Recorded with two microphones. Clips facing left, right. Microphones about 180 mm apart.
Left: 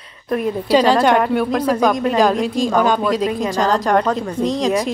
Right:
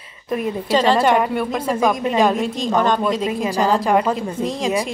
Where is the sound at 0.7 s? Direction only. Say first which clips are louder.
Left 2 dB; centre (ahead or behind).